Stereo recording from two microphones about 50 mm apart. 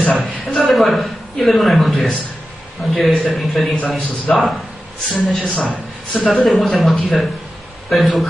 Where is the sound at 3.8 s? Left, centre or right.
Centre.